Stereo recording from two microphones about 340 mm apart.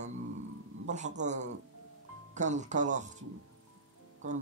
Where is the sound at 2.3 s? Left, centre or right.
Right.